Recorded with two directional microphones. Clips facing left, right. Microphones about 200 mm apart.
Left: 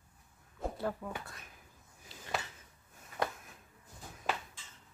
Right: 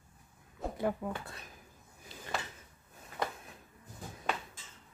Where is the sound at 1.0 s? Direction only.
20° right (ahead or behind).